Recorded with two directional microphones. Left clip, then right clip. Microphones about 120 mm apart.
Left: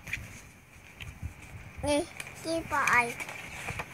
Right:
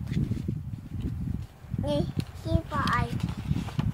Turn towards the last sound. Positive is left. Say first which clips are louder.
# left 3 dB
turn(degrees=45)  # may be behind; listen again after turning